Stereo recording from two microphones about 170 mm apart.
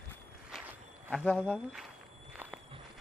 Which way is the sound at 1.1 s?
10° left (ahead or behind).